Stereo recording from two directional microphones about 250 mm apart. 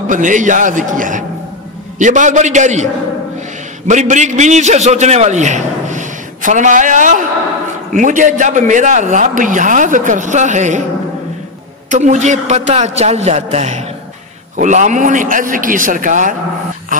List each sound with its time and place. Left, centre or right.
0.1 s a man's voice: right
11.9 s a man's voice: right